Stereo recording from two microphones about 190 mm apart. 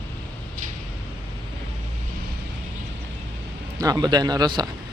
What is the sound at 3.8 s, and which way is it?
Speech, 20° right (ahead or behind).